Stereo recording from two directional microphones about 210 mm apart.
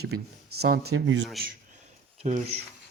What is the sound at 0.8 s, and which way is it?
Speech, 75° right (ahead or behind).